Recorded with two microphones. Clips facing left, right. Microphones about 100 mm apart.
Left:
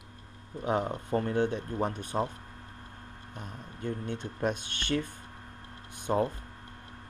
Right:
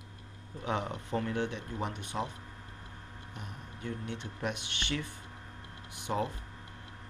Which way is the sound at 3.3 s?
50° left (ahead or behind).